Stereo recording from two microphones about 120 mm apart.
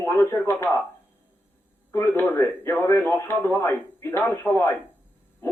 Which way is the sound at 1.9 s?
20° left (ahead or behind).